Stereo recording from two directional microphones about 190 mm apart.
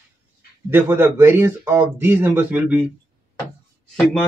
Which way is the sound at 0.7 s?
10° right (ahead or behind).